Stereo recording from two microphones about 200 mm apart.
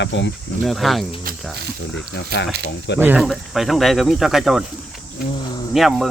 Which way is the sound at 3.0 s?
5° right (ahead or behind).